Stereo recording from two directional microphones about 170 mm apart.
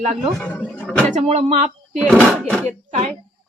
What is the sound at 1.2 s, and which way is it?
Speech, 40° right (ahead or behind).